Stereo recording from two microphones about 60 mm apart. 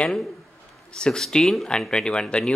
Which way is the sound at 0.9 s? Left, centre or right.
Centre.